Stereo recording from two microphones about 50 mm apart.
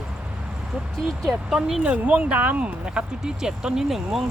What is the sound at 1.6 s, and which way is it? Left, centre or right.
Speech, centre.